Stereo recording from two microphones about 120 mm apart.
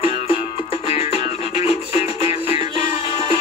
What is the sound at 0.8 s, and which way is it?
Music, 60° left (ahead or behind).